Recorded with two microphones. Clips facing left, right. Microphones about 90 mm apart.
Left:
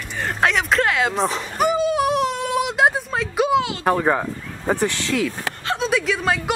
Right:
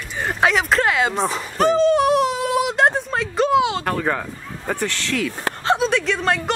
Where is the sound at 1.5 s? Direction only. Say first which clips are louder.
Right 4 dB; 10° left (ahead or behind).